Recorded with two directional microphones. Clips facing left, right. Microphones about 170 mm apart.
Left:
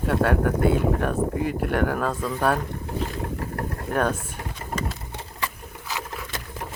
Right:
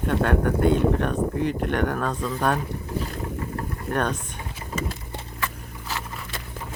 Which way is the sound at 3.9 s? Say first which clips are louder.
Left 2 dB; 5° left (ahead or behind).